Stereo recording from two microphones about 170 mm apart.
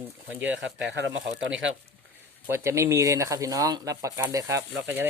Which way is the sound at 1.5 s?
90° right.